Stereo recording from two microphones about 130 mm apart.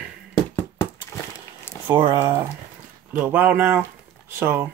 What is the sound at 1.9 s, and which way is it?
Speech, 40° right (ahead or behind).